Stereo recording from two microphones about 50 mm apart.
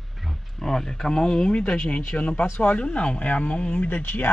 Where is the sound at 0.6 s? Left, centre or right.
Centre.